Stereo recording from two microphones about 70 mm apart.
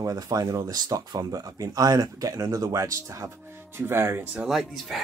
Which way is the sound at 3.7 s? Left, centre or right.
Right.